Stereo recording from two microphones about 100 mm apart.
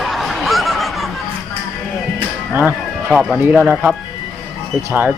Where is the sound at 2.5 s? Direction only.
20° right (ahead or behind).